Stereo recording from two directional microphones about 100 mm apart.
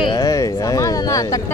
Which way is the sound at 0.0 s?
35° left (ahead or behind).